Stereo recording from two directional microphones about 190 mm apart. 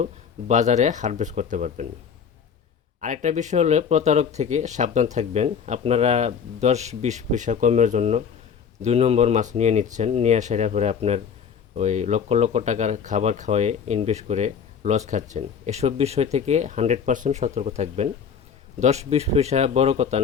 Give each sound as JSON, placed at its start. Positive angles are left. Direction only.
{"t": 0.0, "sound": "speech", "side_deg": -40}
{"t": 3.0, "sound": "speech", "side_deg": -40}